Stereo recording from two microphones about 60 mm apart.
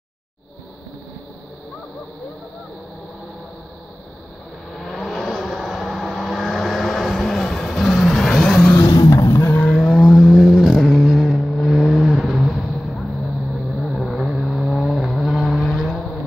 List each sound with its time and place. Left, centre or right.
4.7 s vehicle: centre
8.8 s vehicle: left
9.3 s vehicle: left
9.8 s vehicle: centre